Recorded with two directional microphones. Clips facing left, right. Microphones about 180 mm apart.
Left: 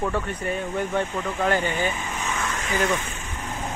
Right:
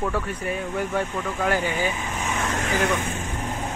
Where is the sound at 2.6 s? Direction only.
45° right (ahead or behind).